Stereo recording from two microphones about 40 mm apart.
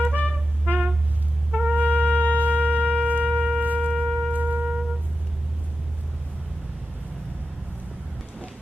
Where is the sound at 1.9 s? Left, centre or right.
Left.